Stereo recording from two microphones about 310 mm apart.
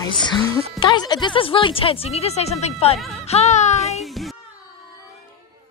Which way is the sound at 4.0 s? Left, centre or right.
Centre.